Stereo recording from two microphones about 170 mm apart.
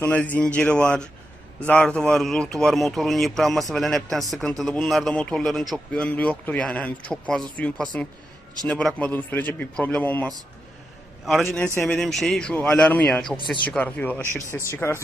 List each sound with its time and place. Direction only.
0.0 s a man's voice: 10° left (ahead or behind)
11.5 s a man's voice: 10° left (ahead or behind)